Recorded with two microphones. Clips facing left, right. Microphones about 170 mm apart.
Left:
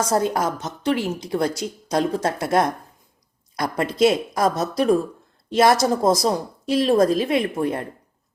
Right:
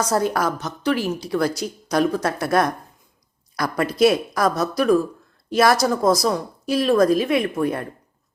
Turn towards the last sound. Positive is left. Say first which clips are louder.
# right 1 dB
turn(degrees=25)  # may be behind; listen again after turning